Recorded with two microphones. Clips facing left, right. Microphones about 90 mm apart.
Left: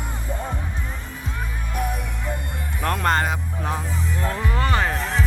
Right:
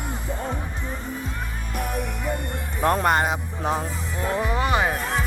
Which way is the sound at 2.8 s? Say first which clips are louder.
Right 2 dB; 20° right (ahead or behind).